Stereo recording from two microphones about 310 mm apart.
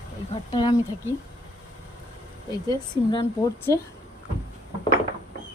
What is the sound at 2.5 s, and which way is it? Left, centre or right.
Speech, centre.